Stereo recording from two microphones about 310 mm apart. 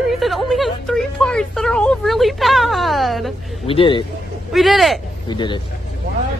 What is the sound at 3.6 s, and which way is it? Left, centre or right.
Speech, centre.